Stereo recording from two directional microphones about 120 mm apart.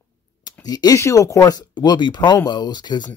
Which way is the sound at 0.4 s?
30° left (ahead or behind).